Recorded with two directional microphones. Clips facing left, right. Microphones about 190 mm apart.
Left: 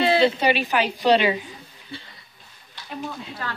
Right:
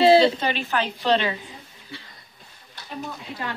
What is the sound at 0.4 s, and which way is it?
A woman's voice, 15° left (ahead or behind).